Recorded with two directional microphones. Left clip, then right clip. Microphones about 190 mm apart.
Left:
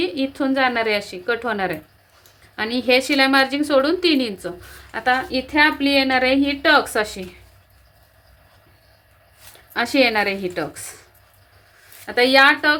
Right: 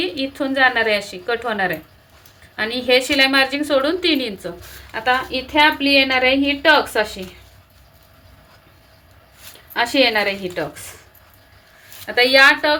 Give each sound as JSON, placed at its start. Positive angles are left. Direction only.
{"t": 0.0, "sound": "a woman's voice", "side_deg": 45}
{"t": 9.7, "sound": "a woman's voice", "side_deg": 35}
{"t": 12.0, "sound": "a woman's voice", "side_deg": 45}